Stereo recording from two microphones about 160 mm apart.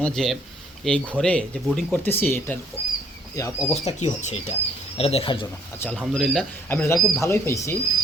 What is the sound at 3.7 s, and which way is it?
Speech, 45° left (ahead or behind).